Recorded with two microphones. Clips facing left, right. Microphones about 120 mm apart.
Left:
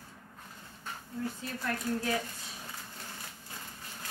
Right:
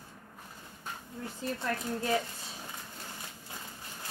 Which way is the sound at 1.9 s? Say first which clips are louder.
Left 3 dB; 20° right (ahead or behind).